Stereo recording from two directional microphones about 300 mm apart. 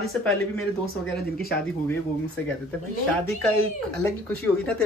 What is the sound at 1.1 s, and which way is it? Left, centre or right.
Speech, left.